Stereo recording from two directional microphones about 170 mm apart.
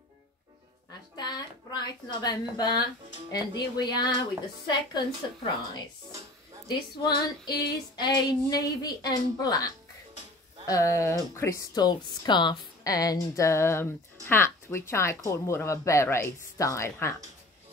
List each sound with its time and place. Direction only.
1.1 s a woman's voice: 25° left (ahead or behind)
7.0 s a woman's voice: 25° left (ahead or behind)
10.7 s a woman's voice: 20° left (ahead or behind)